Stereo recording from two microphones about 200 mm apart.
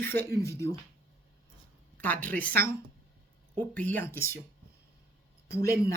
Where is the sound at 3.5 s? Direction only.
10° left (ahead or behind).